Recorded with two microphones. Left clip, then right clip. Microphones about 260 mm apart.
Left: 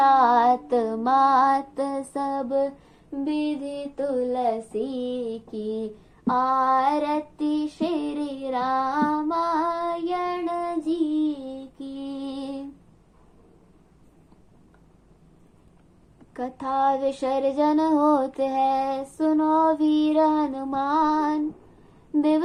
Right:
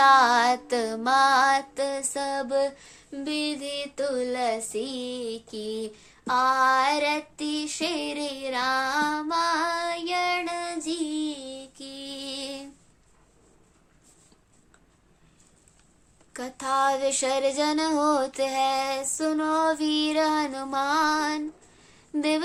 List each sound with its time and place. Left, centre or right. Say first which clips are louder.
0.0 s female singing: left 1 dB; right
3.1 s child singing: left 3 dB; right
16.3 s child singing: even; right